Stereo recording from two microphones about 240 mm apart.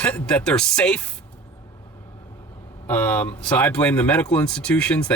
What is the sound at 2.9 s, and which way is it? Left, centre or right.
Speech, centre.